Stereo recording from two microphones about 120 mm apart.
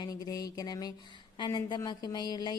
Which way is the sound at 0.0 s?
30° left (ahead or behind).